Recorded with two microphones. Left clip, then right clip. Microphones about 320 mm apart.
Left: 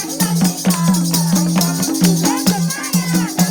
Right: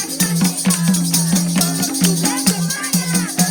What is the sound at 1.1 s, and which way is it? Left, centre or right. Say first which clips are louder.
Music: left 1 dB; centre.